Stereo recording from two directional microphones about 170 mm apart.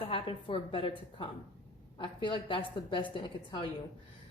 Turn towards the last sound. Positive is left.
turn(degrees=30)  # may be behind; listen again after turning